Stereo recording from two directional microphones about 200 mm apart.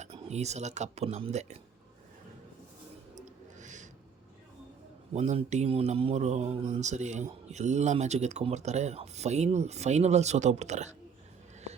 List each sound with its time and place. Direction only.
0.0 s speech: 35° right (ahead or behind)
3.2 s a sound: 40° right (ahead or behind)
5.1 s speech: 35° right (ahead or behind)